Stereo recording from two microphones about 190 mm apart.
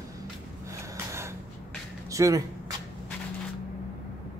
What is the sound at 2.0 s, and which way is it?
Speech, 15° right (ahead or behind).